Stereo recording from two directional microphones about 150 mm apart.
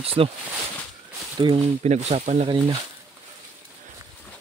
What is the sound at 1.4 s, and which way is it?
Speech, 40° right (ahead or behind).